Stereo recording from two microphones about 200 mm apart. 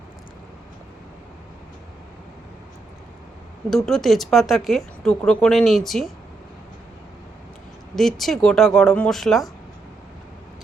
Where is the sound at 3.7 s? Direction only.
Centre (ahead or behind).